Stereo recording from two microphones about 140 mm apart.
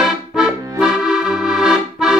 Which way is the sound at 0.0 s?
Centre (ahead or behind).